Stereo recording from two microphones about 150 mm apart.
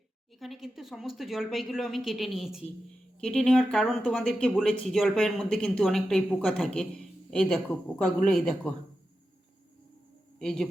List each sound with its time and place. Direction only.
0.3 s speech: centre (ahead or behind)
10.4 s speech: 5° left (ahead or behind)